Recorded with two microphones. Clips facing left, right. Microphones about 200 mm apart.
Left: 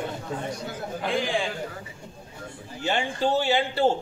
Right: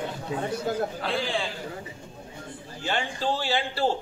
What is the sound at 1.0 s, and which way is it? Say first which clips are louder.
Speech: left 2 dB; 15° left (ahead or behind).